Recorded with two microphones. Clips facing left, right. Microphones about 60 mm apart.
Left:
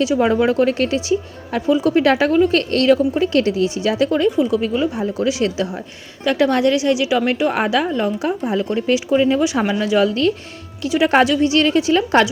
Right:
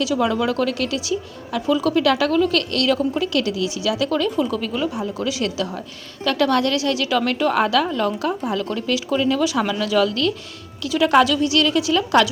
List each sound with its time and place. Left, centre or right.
0.0 s speech: left
4.3 s speech: centre
5.2 s a woman's voice: left